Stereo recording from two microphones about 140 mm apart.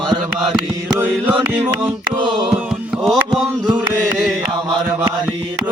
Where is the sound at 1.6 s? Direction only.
15° right (ahead or behind).